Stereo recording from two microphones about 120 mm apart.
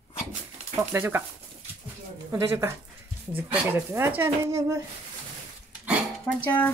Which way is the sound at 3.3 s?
15° right (ahead or behind).